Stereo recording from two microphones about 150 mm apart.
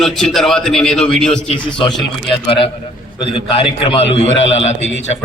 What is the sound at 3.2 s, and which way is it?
A man's voice, 35° left (ahead or behind).